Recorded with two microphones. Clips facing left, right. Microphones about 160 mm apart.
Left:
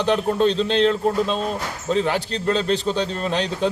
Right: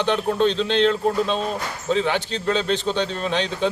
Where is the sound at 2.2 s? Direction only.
35° left (ahead or behind).